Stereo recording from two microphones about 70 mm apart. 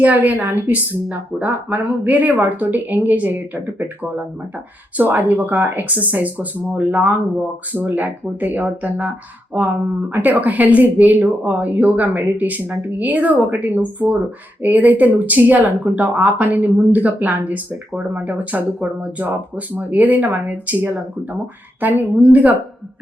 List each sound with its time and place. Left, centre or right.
0.0 s speech: right